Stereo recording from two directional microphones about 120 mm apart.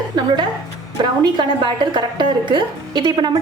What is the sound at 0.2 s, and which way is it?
A woman's voice, 35° right (ahead or behind).